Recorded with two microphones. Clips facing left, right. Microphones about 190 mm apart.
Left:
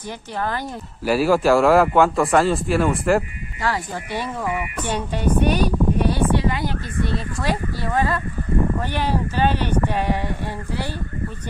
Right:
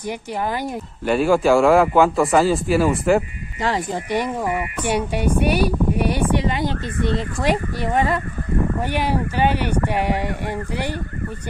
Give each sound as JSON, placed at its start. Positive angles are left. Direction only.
{"t": 1.0, "sound": "speech", "side_deg": 5}
{"t": 3.6, "sound": "speech", "side_deg": -20}